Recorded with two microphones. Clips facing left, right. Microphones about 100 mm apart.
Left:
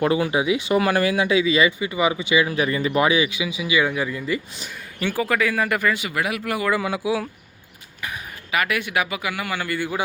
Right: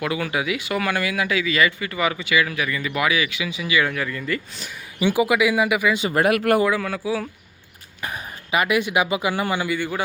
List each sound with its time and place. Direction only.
0.0 s speech: 30° left (ahead or behind)
4.9 s speech: 15° right (ahead or behind)
6.1 s speech: 45° right (ahead or behind)
6.3 s speech: 60° right (ahead or behind)
6.8 s speech: 10° left (ahead or behind)
8.4 s speech: 20° right (ahead or behind)
9.7 s speech: 5° left (ahead or behind)